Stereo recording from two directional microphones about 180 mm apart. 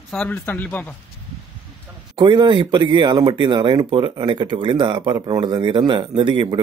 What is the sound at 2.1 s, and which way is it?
Speech, 25° right (ahead or behind).